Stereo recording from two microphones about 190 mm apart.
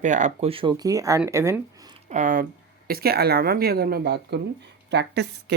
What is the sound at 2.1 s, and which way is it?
Speech, 45° right (ahead or behind).